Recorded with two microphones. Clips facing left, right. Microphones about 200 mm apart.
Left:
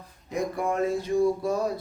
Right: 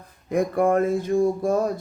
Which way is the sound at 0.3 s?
55° right (ahead or behind).